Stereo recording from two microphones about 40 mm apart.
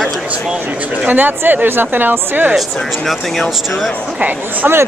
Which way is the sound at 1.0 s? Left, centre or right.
Right.